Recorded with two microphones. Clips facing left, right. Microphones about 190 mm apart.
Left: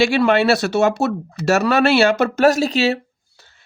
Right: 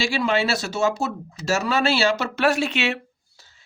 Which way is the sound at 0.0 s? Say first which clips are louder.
Left 7 dB; 60° left (ahead or behind).